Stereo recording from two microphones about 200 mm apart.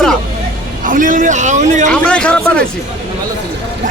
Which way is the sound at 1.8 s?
5° left (ahead or behind).